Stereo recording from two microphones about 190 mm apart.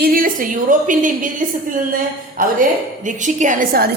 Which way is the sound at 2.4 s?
45° right (ahead or behind).